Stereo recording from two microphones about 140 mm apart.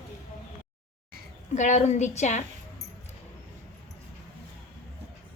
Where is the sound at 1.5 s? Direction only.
60° left (ahead or behind).